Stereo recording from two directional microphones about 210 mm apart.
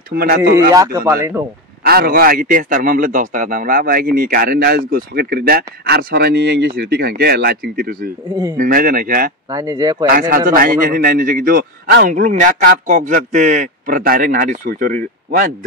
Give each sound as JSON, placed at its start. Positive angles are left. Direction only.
{"t": 0.1, "sound": "a man's voice", "side_deg": -45}
{"t": 0.4, "sound": "a man's voice", "side_deg": -15}
{"t": 1.9, "sound": "a man's voice", "side_deg": -45}
{"t": 9.5, "sound": "a man's voice", "side_deg": -15}
{"t": 10.0, "sound": "a man's voice", "side_deg": -45}